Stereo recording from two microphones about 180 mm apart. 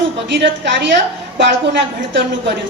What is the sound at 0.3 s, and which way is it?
A woman's voice, 80° right.